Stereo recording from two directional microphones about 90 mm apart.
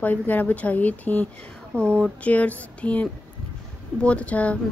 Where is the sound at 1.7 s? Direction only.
25° right (ahead or behind).